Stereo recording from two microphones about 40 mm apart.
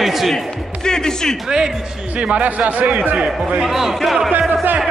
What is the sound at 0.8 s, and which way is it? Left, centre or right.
Speech, centre.